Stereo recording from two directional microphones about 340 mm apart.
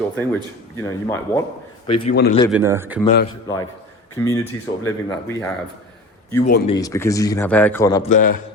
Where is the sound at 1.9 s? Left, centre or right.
Left.